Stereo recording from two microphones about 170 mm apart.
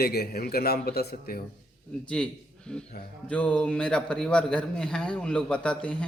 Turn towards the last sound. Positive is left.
turn(degrees=5)  # may be behind; listen again after turning